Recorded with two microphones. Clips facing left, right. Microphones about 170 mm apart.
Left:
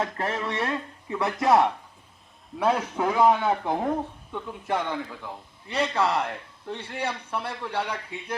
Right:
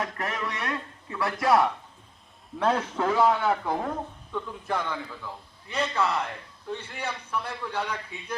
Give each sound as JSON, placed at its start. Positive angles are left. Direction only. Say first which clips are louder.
{"t": 0.0, "sound": "speech", "louder": "left 3 dB", "side_deg": 25}
{"t": 2.6, "sound": "a man's voice", "louder": "left 1 dB", "side_deg": 10}
{"t": 5.7, "sound": "a man's voice", "louder": "left 2 dB", "side_deg": 35}